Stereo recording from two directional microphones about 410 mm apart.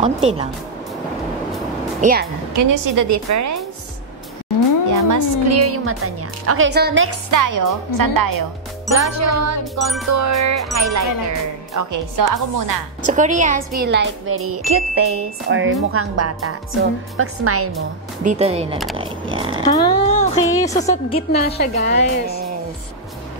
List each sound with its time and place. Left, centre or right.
0.0 s speech: centre
2.0 s a woman's voice: centre
2.5 s a woman's voice: right
4.8 s a woman's voice: right
7.2 s a woman's voice: right
9.0 s a woman's voice: right
9.8 s music: centre
10.0 s a woman's voice: right
13.0 s speech: centre; by 17.6 s right
18.2 s speech: centre
19.6 s a woman's voice: centre